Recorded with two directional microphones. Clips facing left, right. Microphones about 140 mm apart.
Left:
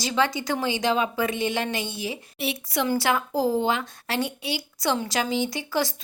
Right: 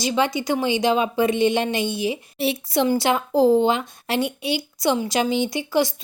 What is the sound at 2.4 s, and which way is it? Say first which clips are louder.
A woman's voice: right 6 dB; 30° right (ahead or behind).